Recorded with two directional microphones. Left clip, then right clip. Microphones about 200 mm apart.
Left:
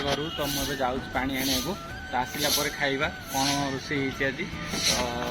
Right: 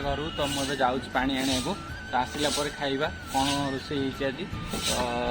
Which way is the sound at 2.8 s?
Centre (ahead or behind).